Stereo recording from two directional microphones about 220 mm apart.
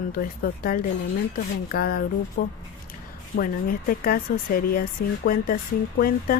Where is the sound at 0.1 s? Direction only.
45° left (ahead or behind).